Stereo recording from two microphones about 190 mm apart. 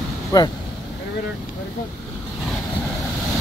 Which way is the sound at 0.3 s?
20° left (ahead or behind).